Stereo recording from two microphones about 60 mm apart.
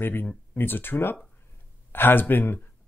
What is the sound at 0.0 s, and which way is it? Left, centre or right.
Speech, left.